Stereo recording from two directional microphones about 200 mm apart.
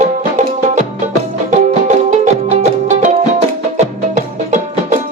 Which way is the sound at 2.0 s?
35° right (ahead or behind).